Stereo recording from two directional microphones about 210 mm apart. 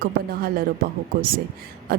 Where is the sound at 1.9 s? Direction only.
45° right (ahead or behind).